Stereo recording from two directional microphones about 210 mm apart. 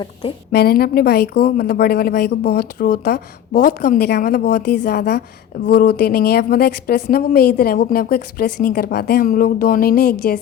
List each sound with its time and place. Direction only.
0.5 s a woman's voice: 45° left (ahead or behind)